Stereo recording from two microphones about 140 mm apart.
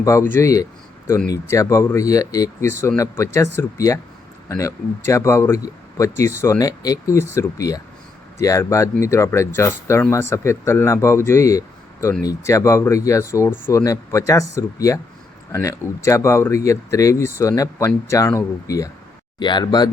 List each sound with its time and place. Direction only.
0.0 s speech: 20° left (ahead or behind)
19.4 s speech: 30° left (ahead or behind)